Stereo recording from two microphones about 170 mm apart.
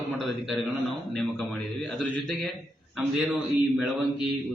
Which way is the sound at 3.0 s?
10° right (ahead or behind).